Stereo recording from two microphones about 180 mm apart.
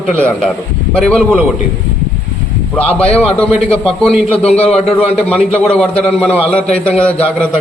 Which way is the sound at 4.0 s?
5° left (ahead or behind).